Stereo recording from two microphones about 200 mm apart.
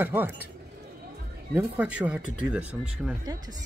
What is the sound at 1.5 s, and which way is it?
Speech, 5° right (ahead or behind).